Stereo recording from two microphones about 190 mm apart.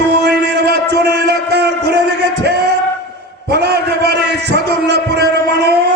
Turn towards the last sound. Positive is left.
turn(degrees=-60)  # may be behind; listen again after turning